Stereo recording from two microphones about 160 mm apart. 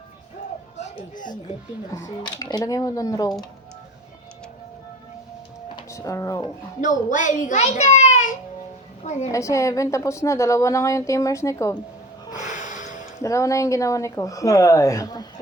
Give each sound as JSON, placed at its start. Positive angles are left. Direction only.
{"t": 0.8, "sound": "a sound", "side_deg": 55}
{"t": 1.9, "sound": "a woman's voice", "side_deg": 20}
{"t": 5.7, "sound": "a sound", "side_deg": 20}
{"t": 6.8, "sound": "a child's voice", "side_deg": 55}
{"t": 9.3, "sound": "a woman's voice", "side_deg": 20}
{"t": 12.4, "sound": "snort", "side_deg": 50}
{"t": 13.2, "sound": "a woman's voice", "side_deg": 20}